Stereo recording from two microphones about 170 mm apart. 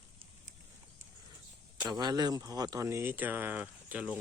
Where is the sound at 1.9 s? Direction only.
25° right (ahead or behind).